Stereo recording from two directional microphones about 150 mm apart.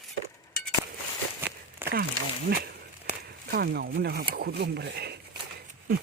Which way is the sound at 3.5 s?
90° right.